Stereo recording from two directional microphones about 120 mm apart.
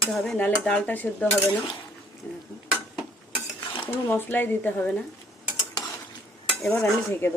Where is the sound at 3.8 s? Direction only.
15° left (ahead or behind).